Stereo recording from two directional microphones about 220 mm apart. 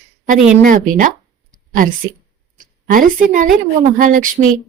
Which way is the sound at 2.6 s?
40° right (ahead or behind).